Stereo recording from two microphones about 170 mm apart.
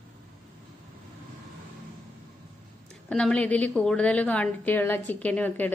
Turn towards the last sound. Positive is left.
turn(degrees=10)  # may be behind; listen again after turning